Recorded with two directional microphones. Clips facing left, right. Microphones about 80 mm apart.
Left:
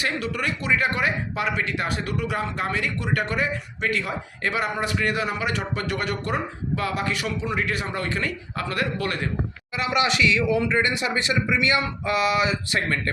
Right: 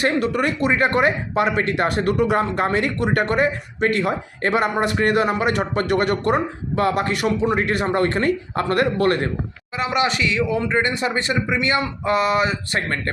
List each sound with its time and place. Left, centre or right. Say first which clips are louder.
0.0 s speech: right 7 dB; right
9.7 s speech: right 2 dB; right